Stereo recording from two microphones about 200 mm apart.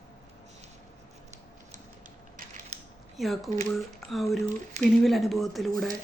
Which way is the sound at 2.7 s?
35° right (ahead or behind).